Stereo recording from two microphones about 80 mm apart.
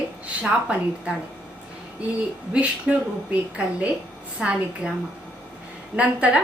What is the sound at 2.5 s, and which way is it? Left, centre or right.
Speech, centre.